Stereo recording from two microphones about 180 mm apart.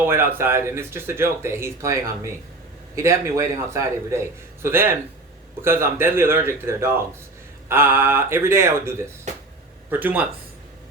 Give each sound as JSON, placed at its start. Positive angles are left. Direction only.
{"t": 0.1, "sound": "speech", "side_deg": -15}